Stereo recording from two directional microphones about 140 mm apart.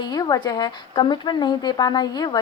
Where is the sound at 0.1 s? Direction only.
30° left (ahead or behind).